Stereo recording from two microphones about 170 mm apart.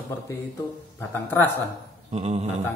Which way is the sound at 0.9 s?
10° left (ahead or behind).